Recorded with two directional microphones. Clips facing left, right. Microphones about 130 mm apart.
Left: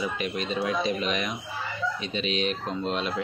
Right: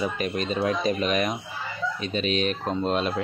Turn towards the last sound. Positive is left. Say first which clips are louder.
# right 4 dB
turn(degrees=-45)  # may be behind; listen again after turning